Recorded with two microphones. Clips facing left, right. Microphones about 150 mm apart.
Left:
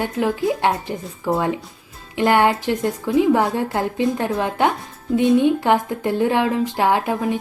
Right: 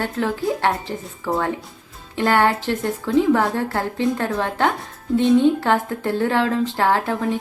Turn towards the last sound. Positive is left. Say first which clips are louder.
# left 1 dB
turn(degrees=15)  # may be behind; listen again after turning